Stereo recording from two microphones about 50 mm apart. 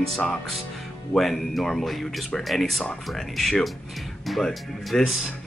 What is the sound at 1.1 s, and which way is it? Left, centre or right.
Speech, centre.